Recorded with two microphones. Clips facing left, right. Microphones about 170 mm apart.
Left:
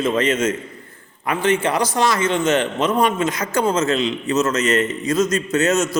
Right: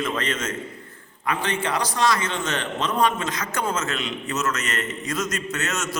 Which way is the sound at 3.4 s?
30° left (ahead or behind).